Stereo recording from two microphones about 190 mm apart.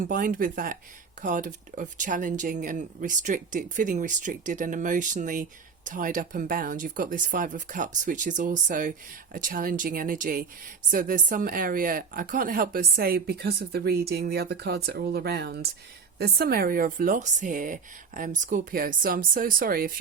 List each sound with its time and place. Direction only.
0.0 s speech: 45° right (ahead or behind)